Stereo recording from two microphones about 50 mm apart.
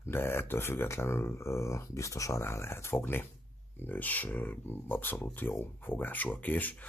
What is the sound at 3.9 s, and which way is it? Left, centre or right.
Speech, left.